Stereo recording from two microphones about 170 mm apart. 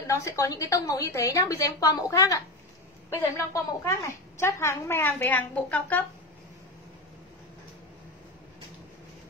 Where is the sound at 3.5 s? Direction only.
20° left (ahead or behind).